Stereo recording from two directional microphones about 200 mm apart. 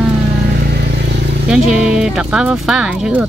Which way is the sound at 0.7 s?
55° right (ahead or behind).